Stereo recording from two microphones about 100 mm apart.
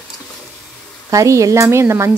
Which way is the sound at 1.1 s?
35° right (ahead or behind).